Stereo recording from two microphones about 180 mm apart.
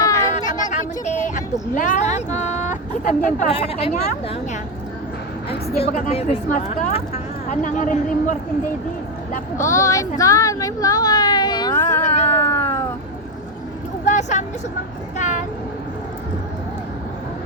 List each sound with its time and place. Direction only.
0.3 s a sound: 40° left (ahead or behind)
1.7 s speech: 45° left (ahead or behind)
3.5 s a woman's voice: 35° left (ahead or behind)
5.5 s a woman's voice: 35° left (ahead or behind)
9.6 s speech: 15° left (ahead or behind)
10.2 s a sound: 20° left (ahead or behind)
12.3 s cat: 15° left (ahead or behind)
14.0 s vehicle: 40° left (ahead or behind)
15.2 s speech: 45° left (ahead or behind)